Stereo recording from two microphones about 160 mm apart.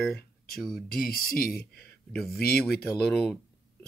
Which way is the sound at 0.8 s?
65° left (ahead or behind).